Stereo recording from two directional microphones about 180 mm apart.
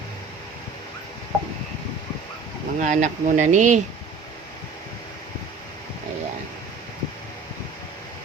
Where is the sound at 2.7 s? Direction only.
45° right (ahead or behind).